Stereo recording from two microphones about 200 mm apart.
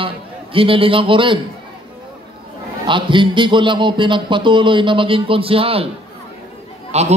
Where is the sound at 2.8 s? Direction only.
25° right (ahead or behind).